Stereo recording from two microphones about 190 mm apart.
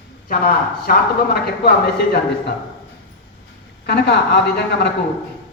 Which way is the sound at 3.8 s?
60° left (ahead or behind).